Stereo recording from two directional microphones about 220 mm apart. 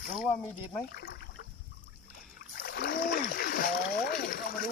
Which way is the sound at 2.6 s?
45° left (ahead or behind).